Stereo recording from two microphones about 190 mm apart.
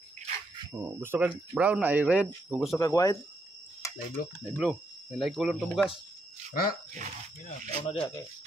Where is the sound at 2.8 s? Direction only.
15° left (ahead or behind).